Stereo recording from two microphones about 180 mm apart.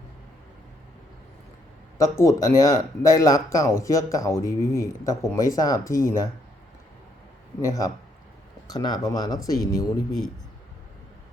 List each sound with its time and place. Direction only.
2.0 s speech: 15° left (ahead or behind)
7.6 s speech: 20° left (ahead or behind)